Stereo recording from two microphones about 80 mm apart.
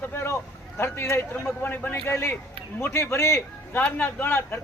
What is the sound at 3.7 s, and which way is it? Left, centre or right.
Speech, left.